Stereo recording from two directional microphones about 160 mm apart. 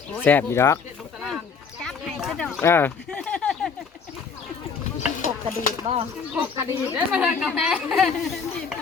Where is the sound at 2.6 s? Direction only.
15° left (ahead or behind).